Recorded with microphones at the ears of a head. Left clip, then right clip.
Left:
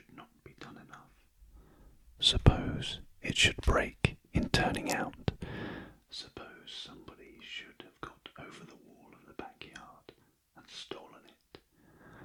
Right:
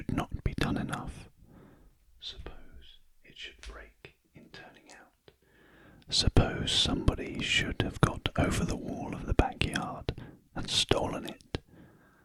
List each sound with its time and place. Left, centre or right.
0.0 s whispering: right
2.1 s whispering: left
6.1 s speech: right